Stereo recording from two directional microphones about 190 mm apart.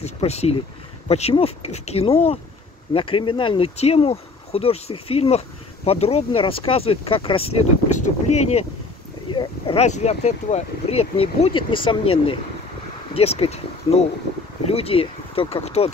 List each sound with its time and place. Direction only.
0.0 s speech: 35° left (ahead or behind)